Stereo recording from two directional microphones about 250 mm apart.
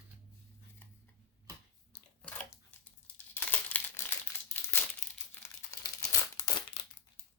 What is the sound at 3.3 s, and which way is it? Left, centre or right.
Crumpling, centre.